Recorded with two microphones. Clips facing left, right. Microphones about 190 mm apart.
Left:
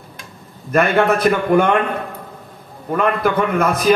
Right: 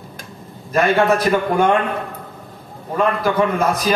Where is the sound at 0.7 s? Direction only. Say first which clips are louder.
Even; 60° left (ahead or behind).